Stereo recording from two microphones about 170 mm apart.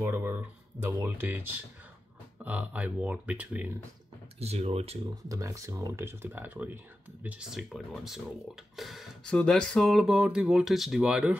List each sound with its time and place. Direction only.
0.0 s speech: 15° right (ahead or behind)
4.4 s speech: 40° right (ahead or behind)
5.3 s speech: 20° right (ahead or behind)